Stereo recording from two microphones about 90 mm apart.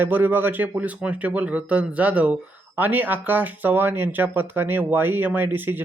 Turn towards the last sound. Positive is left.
turn(degrees=-20)  # may be behind; listen again after turning